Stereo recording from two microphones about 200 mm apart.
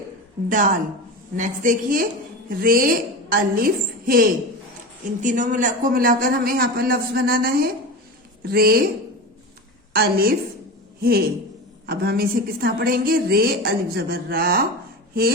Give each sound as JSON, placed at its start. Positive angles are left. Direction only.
{"t": 0.4, "sound": "a woman's voice", "side_deg": -40}
{"t": 9.9, "sound": "a woman's voice", "side_deg": -50}